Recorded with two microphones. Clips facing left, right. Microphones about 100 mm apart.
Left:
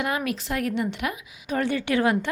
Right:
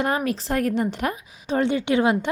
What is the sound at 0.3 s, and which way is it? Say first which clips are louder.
Speech: right 4 dB; 35° right (ahead or behind).